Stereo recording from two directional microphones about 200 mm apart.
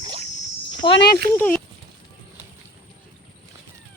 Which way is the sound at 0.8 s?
25° left (ahead or behind).